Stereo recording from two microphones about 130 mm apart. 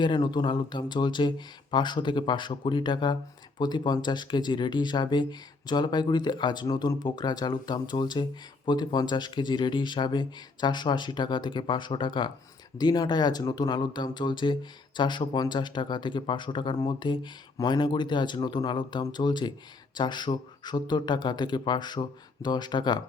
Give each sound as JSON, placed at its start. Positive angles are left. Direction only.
{"t": 0.0, "sound": "speech", "side_deg": 35}